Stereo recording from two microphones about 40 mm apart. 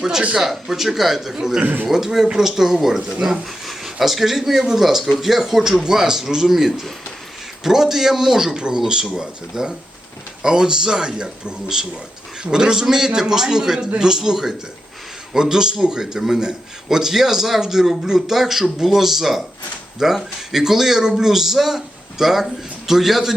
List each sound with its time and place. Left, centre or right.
0.2 s speech: right
0.4 s a man's voice: centre
8.5 s a man's voice: right; by 23.3 s centre